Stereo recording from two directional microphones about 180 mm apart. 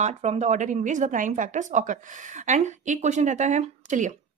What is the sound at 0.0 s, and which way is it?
A woman's voice, 40° right (ahead or behind).